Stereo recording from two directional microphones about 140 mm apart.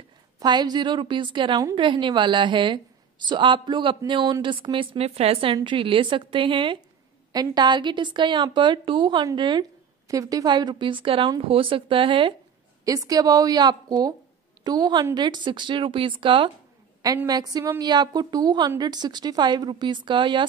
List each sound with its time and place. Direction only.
0.4 s a woman's voice: 30° right (ahead or behind)
12.8 s a woman's voice: 25° right (ahead or behind)